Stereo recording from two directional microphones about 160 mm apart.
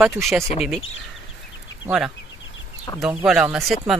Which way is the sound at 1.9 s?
5° right (ahead or behind).